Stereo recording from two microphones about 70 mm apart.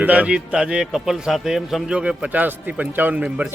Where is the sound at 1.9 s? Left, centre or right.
Centre.